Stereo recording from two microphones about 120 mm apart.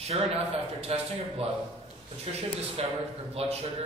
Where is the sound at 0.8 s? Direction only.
55° right (ahead or behind).